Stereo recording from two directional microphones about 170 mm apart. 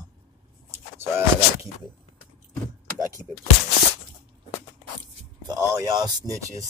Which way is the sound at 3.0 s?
20° right (ahead or behind).